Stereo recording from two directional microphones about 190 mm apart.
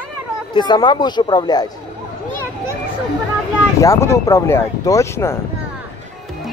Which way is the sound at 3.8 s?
15° left (ahead or behind).